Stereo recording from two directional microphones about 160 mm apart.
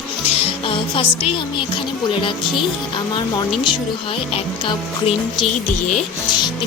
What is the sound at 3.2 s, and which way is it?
Speech, 30° left (ahead or behind).